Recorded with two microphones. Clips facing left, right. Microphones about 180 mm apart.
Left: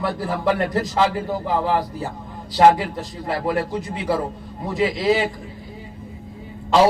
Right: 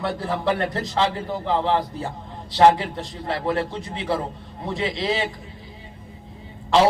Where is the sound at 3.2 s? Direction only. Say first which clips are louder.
Left 1 dB; 25° right (ahead or behind).